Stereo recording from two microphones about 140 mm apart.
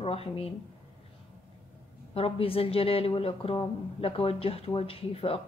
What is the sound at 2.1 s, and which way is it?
Speech, 40° left (ahead or behind).